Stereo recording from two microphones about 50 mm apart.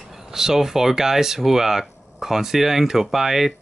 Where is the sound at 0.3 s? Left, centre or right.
Centre.